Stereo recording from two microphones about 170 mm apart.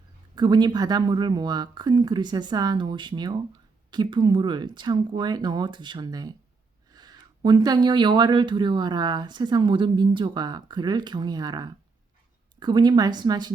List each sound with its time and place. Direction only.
0.3 s speech: 25° right (ahead or behind)